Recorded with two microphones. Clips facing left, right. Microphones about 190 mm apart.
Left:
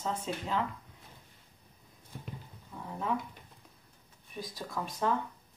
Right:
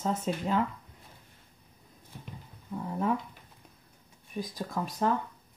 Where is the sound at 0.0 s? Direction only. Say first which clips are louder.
Right 5 dB; 40° right (ahead or behind).